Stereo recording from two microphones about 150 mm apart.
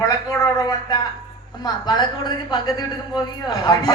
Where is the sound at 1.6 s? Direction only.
30° left (ahead or behind).